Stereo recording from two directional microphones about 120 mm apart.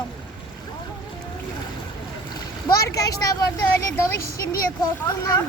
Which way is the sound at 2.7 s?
30° left (ahead or behind).